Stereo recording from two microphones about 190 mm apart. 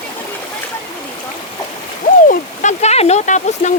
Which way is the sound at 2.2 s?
40° left (ahead or behind).